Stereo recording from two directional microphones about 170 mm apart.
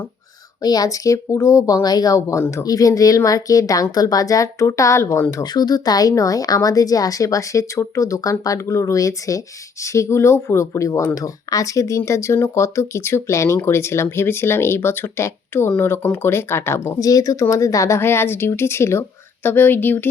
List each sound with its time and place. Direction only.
0.6 s speech: 20° left (ahead or behind)